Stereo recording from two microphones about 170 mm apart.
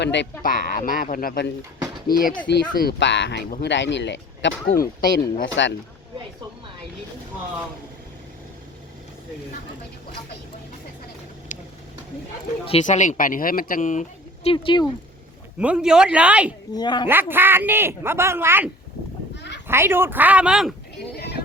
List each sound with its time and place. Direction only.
0.0 s speech: 90° left
0.4 s speech: 55° left (ahead or behind)
2.5 s speech: 70° left (ahead or behind)
5.2 s speech: 90° left
12.6 s speech: 40° left (ahead or behind)
14.5 s a woman's voice: 30° left (ahead or behind)
15.5 s speech: 5° right (ahead or behind)
16.7 s a woman's voice: 25° left (ahead or behind)
17.1 s speech: 10° right (ahead or behind)
21.2 s a sound: 70° left (ahead or behind)